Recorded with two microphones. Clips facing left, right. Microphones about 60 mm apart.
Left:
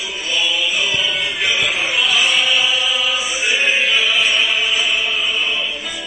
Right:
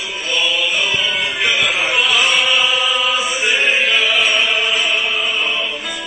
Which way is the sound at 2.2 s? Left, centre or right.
Right.